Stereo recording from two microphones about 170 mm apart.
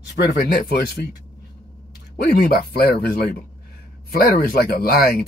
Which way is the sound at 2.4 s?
60° left (ahead or behind).